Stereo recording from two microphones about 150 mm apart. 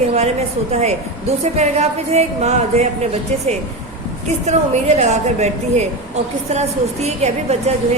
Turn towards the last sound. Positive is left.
turn(degrees=-45)  # may be behind; listen again after turning